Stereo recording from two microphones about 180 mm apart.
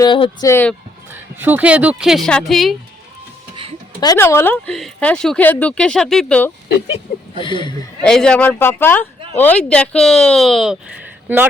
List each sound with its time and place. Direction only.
0.0 s speech: 25° left (ahead or behind)
1.1 s speech: 10° right (ahead or behind)
3.5 s a sound: 30° right (ahead or behind)
4.0 s speech: 15° left (ahead or behind)
7.3 s speech: 25° left (ahead or behind)
8.0 s speech: 5° left (ahead or behind)